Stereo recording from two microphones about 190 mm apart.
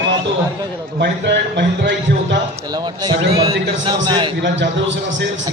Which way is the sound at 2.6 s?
20° right (ahead or behind).